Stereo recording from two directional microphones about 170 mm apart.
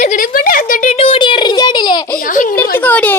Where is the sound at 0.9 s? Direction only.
35° left (ahead or behind).